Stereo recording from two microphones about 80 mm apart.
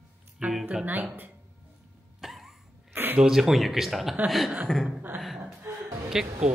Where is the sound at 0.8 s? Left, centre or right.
Right.